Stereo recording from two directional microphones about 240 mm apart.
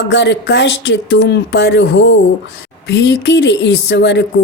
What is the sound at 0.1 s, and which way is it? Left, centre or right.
A woman's voice, left.